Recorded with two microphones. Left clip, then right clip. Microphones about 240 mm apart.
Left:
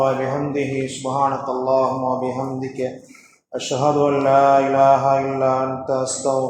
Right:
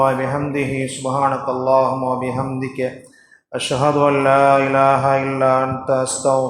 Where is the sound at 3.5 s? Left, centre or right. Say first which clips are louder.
Right 2 dB; right.